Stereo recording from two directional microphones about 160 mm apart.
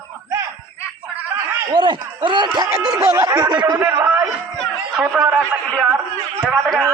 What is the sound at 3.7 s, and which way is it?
A man's voice, 15° right (ahead or behind).